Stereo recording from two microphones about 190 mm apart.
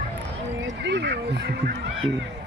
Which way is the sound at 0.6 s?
65° right (ahead or behind).